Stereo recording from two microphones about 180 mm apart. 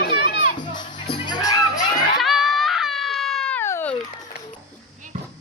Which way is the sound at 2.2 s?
Centre (ahead or behind).